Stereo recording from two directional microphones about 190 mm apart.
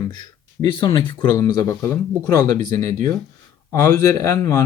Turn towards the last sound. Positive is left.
turn(degrees=15)  # may be behind; listen again after turning